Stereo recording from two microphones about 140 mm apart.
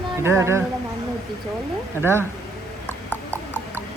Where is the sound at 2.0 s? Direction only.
15° right (ahead or behind).